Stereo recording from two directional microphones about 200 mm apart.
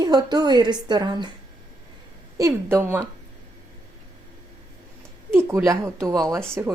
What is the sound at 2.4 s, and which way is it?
Speech, 15° right (ahead or behind).